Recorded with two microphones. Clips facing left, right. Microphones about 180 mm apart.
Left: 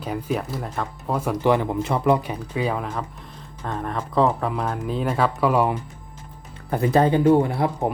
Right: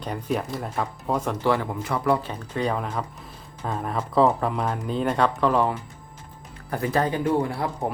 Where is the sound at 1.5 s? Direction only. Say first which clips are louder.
Left 5 dB; 20° left (ahead or behind).